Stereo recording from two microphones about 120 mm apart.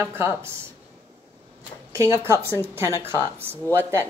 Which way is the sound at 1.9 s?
25° right (ahead or behind).